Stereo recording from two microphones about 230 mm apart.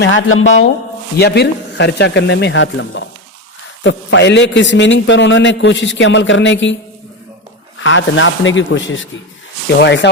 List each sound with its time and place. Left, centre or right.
0.0 s a man's voice: left
1.2 s a man's voice: left
7.8 s a man's voice: left